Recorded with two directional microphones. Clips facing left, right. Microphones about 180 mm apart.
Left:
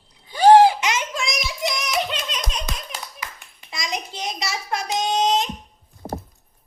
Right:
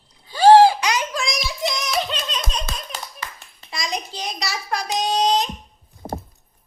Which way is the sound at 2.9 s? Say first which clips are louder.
Right 1 dB; 15° left (ahead or behind).